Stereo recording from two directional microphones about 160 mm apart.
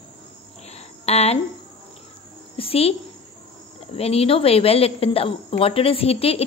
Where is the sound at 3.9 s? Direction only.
40° left (ahead or behind).